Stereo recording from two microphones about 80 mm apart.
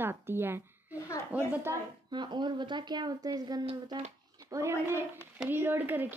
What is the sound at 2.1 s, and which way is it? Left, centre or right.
Speech, right.